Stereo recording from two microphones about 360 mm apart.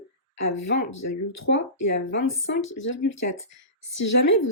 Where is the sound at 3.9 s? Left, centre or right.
Left.